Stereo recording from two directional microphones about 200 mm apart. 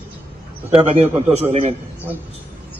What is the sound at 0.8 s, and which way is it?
Speech, 30° right (ahead or behind).